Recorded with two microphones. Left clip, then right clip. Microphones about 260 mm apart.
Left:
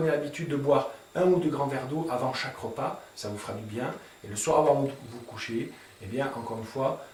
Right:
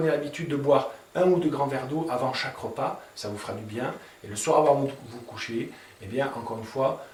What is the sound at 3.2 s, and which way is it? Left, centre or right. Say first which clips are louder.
Speech: right 2 dB; centre.